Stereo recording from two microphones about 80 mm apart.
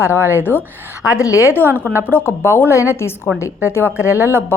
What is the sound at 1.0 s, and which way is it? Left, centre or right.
Speech, left.